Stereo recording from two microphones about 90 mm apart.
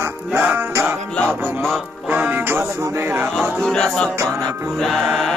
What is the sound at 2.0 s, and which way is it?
Music, 20° right (ahead or behind).